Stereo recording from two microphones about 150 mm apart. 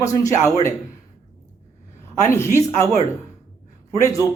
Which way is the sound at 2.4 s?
15° left (ahead or behind).